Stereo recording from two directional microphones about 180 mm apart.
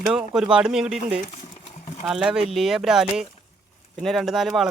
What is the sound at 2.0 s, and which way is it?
Speech, 5° right (ahead or behind).